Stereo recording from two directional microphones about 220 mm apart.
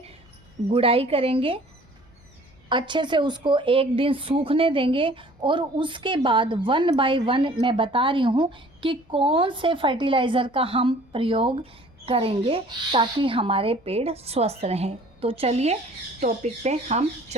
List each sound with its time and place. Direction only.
0.7 s speech: 25° right (ahead or behind)
2.6 s speech: 20° right (ahead or behind)